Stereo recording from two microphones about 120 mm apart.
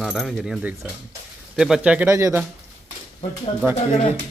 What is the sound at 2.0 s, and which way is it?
Speech, 25° right (ahead or behind).